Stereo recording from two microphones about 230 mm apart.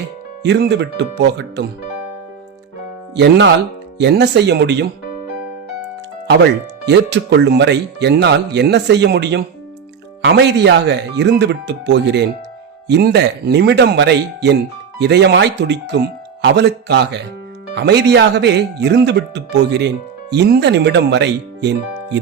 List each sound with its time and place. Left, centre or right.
0.4 s speech: right
3.2 s speech: right
6.8 s speech: right